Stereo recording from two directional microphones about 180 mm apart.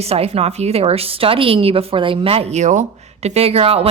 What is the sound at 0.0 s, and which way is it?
A woman's voice, 35° right (ahead or behind).